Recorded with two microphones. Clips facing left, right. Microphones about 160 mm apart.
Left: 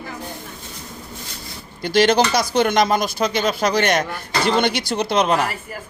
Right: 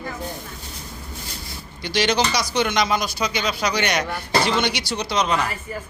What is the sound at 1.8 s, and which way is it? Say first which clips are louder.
Speech: left 5 dB; 50° left (ahead or behind).